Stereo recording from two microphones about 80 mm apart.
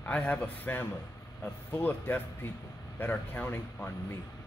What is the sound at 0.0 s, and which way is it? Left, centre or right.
Speech, centre.